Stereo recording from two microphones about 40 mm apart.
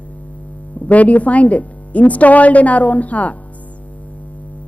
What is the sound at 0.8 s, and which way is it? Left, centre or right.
A woman's voice, left.